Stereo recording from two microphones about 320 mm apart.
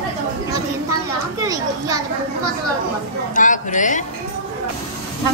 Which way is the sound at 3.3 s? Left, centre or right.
Left.